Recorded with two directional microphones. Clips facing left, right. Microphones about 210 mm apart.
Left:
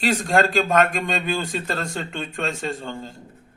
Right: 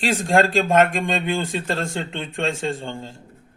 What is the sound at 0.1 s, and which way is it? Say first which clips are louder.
Speech: right 2 dB; 25° right (ahead or behind).